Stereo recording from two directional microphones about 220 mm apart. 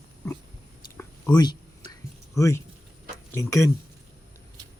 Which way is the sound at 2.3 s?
15° left (ahead or behind).